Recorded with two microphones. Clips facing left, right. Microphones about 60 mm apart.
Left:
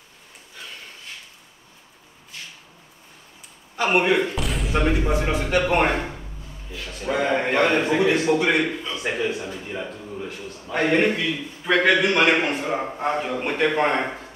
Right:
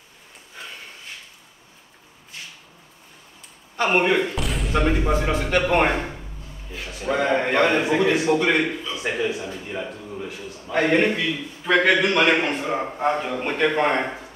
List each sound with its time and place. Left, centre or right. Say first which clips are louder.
3.9 s a man's voice: left 1 dB; centre
5.1 s speech: right 1 dB; centre
5.6 s a man's voice: right 1 dB; centre
8.4 s speech: even; centre
8.6 s a man's voice: even; centre